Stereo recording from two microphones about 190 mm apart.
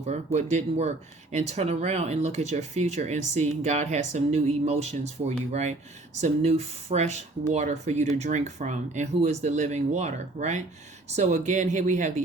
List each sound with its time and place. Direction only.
0.1 s speech: 35° right (ahead or behind)